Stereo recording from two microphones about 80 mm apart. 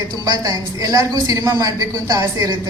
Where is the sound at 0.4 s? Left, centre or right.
Right.